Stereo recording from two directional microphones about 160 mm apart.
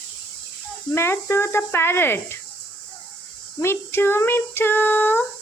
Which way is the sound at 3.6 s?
15° left (ahead or behind).